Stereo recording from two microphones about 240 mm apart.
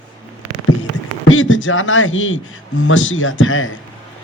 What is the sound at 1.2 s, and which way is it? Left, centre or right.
A man's voice, left.